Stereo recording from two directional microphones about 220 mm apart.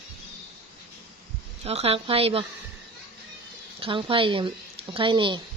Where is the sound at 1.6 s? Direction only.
30° right (ahead or behind).